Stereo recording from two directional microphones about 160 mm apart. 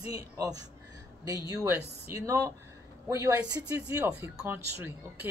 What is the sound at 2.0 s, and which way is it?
Speech, 20° right (ahead or behind).